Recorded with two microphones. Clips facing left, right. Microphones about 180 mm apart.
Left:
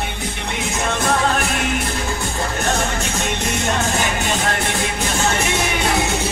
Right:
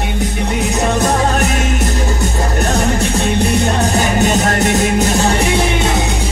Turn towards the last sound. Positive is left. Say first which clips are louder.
# right 6 dB
turn(degrees=-35)  # may be behind; listen again after turning